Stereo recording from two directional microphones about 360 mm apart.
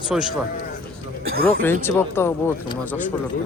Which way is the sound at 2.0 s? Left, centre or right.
Centre.